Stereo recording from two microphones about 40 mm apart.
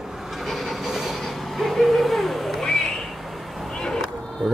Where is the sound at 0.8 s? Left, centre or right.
Centre.